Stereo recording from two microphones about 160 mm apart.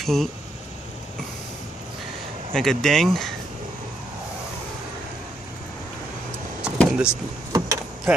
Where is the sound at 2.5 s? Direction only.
Centre (ahead or behind).